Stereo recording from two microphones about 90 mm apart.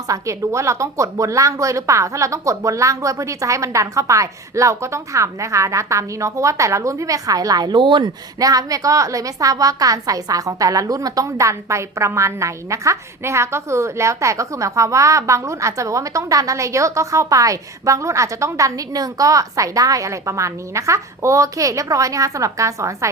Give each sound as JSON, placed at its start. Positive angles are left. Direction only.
{"t": 0.1, "sound": "a woman's voice", "side_deg": -35}
{"t": 8.4, "sound": "a woman's voice", "side_deg": -40}